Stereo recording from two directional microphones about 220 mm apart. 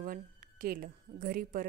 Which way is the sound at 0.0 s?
40° right (ahead or behind).